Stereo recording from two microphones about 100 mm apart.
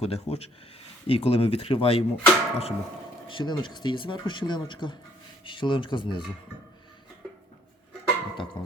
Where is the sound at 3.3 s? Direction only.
50° left (ahead or behind).